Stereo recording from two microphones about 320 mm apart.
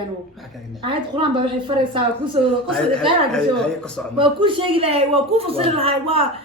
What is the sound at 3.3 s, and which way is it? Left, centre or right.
Speech, centre.